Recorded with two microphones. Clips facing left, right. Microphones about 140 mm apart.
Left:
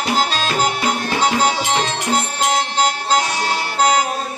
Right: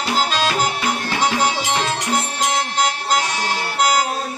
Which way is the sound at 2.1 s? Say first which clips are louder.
Left 2 dB; 30° left (ahead or behind).